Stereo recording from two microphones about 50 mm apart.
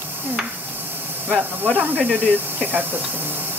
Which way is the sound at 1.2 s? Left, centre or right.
Right.